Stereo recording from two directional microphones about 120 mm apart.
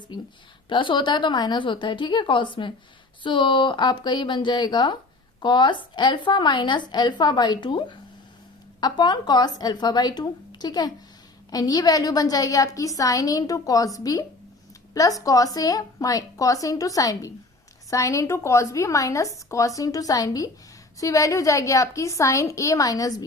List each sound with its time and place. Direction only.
0.7 s a woman's voice: 40° left (ahead or behind)